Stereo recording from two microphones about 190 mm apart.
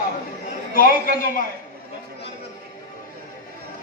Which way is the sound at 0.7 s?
50° left (ahead or behind).